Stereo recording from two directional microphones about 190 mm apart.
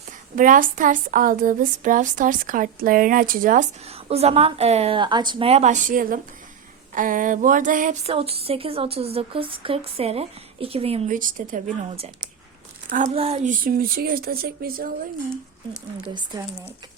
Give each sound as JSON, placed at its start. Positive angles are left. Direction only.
{"t": 0.3, "sound": "speech", "side_deg": -45}
{"t": 8.1, "sound": "speech", "side_deg": -30}
{"t": 11.1, "sound": "speech", "side_deg": -45}
{"t": 11.9, "sound": "speech", "side_deg": -30}
{"t": 13.1, "sound": "speech", "side_deg": -35}
{"t": 16.1, "sound": "speech", "side_deg": -20}